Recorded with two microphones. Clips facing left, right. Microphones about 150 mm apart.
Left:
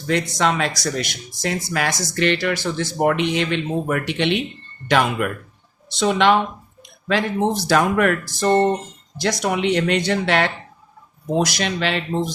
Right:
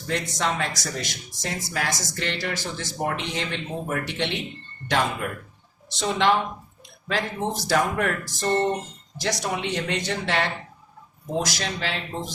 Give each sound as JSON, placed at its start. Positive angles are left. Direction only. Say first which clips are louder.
{"t": 0.1, "sound": "speech", "louder": "left 6 dB", "side_deg": 75}
{"t": 8.4, "sound": "a sound", "louder": "left 6 dB", "side_deg": 60}
{"t": 9.2, "sound": "speech", "louder": "left 7 dB", "side_deg": 75}